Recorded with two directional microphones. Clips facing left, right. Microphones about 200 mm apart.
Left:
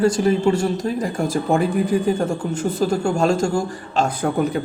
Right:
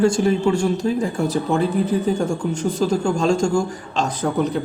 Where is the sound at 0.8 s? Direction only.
10° left (ahead or behind).